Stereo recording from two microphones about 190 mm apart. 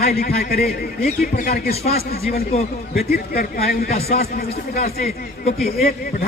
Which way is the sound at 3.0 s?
55° left (ahead or behind).